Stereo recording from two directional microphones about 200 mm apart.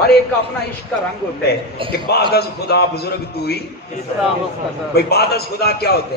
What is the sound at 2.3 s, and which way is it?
A man's voice, 55° left (ahead or behind).